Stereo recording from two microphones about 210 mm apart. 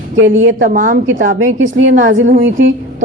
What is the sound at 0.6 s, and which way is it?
Speech, 40° right (ahead or behind).